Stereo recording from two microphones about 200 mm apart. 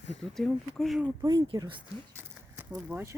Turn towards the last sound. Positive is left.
turn(degrees=-10)  # may be behind; listen again after turning